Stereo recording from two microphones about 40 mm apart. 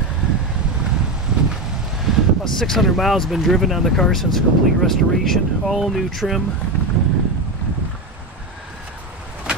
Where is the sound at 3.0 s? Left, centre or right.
Centre.